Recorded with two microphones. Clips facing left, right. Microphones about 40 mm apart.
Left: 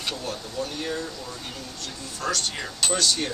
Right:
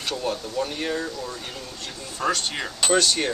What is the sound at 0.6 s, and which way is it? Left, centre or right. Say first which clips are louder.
Speech: right 1 dB; right.